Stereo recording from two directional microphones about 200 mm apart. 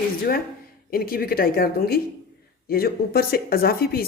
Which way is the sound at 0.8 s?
45° left (ahead or behind).